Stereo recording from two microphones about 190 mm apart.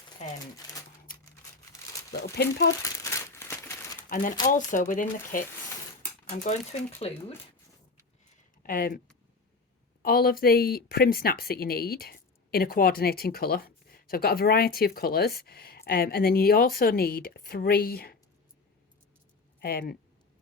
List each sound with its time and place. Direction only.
1.7 s crumpling: 15° left (ahead or behind)
2.3 s speech: 65° left (ahead or behind)
2.8 s crumpling: 15° left (ahead or behind)
4.1 s speech: 45° left (ahead or behind)
8.6 s speech: 45° left (ahead or behind)
10.0 s speech: 50° left (ahead or behind)
19.5 s speech: 55° left (ahead or behind)